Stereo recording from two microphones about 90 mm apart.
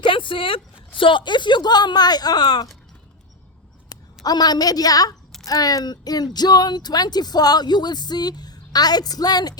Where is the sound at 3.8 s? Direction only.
45° left (ahead or behind).